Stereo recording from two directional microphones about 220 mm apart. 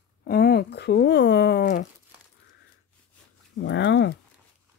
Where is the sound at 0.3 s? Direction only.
45° left (ahead or behind).